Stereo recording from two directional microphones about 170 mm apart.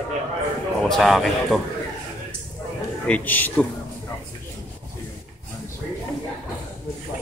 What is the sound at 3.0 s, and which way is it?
Speech, 10° left (ahead or behind).